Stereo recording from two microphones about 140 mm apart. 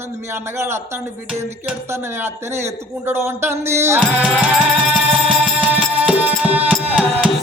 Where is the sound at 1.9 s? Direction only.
15° right (ahead or behind).